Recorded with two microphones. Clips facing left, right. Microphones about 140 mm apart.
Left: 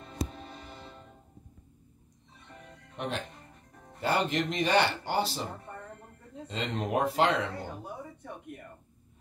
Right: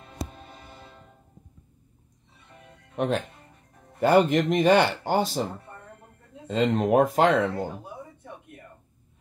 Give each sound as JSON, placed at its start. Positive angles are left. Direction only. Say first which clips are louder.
{"t": 4.0, "sound": "speech", "louder": "right 9 dB", "side_deg": -50}
{"t": 6.4, "sound": "speech", "louder": "right 10 dB", "side_deg": -45}